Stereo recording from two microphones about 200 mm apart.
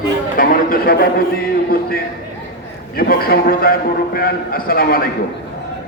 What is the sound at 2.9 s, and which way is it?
A man's voice, 50° left (ahead or behind).